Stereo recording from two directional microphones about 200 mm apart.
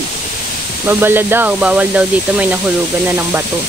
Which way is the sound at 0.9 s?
10° right (ahead or behind).